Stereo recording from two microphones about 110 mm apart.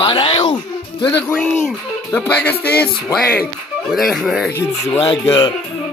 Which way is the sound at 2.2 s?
15° left (ahead or behind).